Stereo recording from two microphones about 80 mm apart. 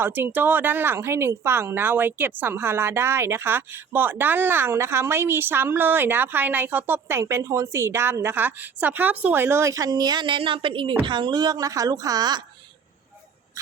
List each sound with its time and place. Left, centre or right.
0.0 s speech: right